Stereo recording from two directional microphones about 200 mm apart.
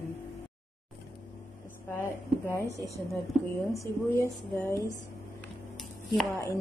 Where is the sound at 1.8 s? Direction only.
15° left (ahead or behind).